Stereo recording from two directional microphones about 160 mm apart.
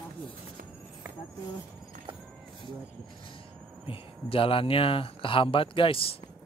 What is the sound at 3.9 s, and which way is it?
Speech, 35° left (ahead or behind).